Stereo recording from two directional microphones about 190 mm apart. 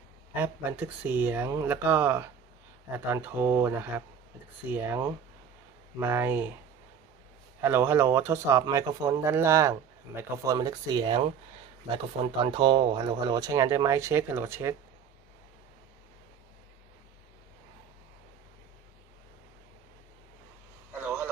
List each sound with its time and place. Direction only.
0.3 s speech: 10° right (ahead or behind)
7.6 s speech: 15° right (ahead or behind)
12.4 s speech: 25° right (ahead or behind)
21.0 s vehicle: 10° right (ahead or behind)